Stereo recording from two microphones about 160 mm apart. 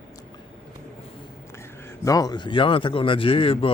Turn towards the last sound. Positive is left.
turn(degrees=35)  # may be behind; listen again after turning